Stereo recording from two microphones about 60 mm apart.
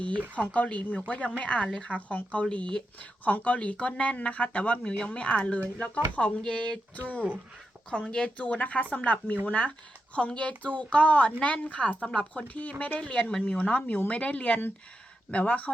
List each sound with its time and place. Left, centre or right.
0.3 s speech: left
8.1 s speech: centre